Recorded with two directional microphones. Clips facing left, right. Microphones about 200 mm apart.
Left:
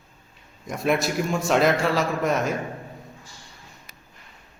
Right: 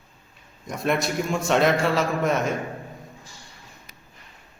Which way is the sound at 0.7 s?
Centre (ahead or behind).